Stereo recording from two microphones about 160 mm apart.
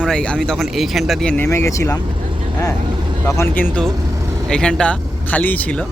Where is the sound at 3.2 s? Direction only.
15° left (ahead or behind).